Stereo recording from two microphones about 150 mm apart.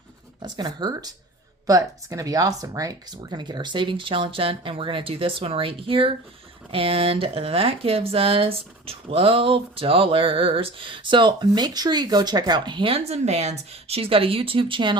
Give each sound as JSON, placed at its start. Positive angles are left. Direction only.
{"t": 0.4, "sound": "speech", "side_deg": -30}